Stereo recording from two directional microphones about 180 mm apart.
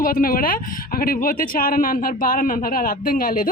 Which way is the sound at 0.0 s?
50° left (ahead or behind).